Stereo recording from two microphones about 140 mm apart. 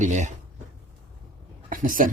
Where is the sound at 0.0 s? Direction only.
60° right (ahead or behind).